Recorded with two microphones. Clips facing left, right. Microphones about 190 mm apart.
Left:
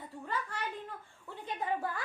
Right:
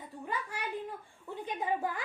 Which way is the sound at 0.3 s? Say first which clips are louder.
Right 1 dB; 10° right (ahead or behind).